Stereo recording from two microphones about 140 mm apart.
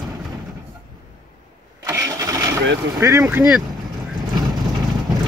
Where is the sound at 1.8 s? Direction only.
25° right (ahead or behind).